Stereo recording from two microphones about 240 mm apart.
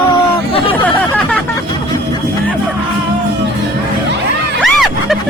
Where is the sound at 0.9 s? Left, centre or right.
Centre.